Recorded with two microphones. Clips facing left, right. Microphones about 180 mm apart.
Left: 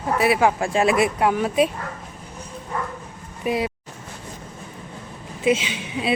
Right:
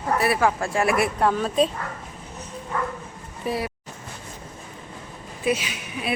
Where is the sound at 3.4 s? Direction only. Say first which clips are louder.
Left 4 dB; 20° left (ahead or behind).